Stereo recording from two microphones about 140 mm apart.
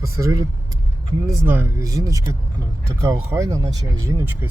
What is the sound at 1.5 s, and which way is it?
Speech, 20° right (ahead or behind).